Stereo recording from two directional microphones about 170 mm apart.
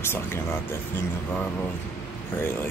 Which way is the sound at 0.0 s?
15° left (ahead or behind).